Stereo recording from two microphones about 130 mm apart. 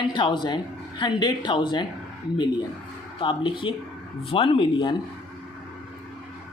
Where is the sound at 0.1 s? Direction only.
35° left (ahead or behind).